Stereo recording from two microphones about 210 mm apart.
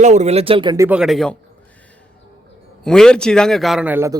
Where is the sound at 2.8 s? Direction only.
5° left (ahead or behind).